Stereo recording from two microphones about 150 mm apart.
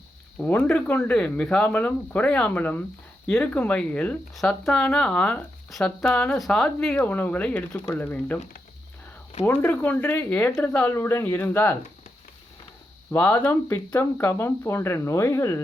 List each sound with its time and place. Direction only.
0.3 s speech: 10° left (ahead or behind)
9.4 s speech: 15° left (ahead or behind)
13.1 s speech: 10° left (ahead or behind)